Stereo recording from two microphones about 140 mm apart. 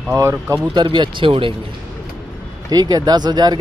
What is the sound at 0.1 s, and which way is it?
Speech, 20° right (ahead or behind).